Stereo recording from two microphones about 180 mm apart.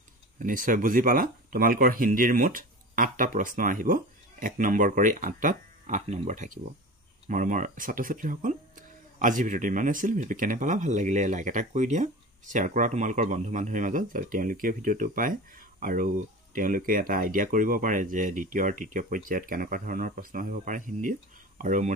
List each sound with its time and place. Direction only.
0.4 s speech: 50° right (ahead or behind)